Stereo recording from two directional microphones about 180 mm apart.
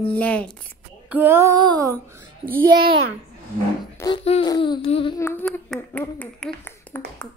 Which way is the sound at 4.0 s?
25° left (ahead or behind).